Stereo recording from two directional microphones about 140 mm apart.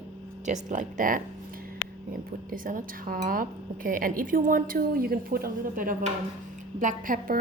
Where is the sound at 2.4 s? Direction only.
80° right.